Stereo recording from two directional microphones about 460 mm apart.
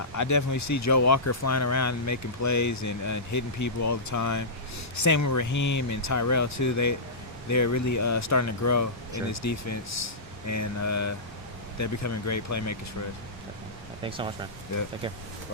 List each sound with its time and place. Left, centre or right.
0.2 s speech: left
14.0 s speech: centre